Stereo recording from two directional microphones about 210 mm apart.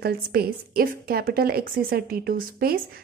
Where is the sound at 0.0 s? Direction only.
45° right (ahead or behind).